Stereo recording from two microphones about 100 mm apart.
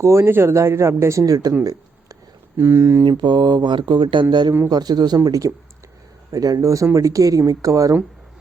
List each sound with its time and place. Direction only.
0.0 s speech: 25° right (ahead or behind)
2.6 s speech: 25° right (ahead or behind)
3.0 s speech: 50° right (ahead or behind)